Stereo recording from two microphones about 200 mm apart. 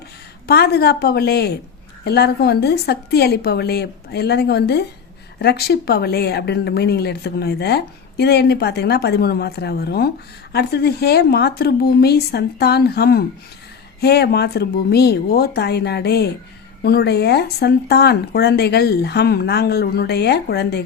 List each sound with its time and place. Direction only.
0.4 s a woman's voice: 55° left (ahead or behind)